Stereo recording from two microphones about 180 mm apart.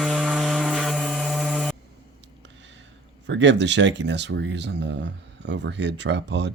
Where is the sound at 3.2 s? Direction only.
80° right.